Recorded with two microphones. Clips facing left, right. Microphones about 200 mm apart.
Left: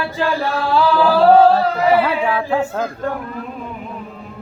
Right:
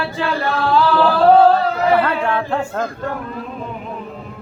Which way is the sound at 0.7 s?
5° left (ahead or behind).